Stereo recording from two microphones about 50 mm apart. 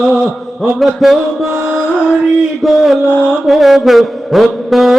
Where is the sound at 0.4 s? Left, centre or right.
Centre.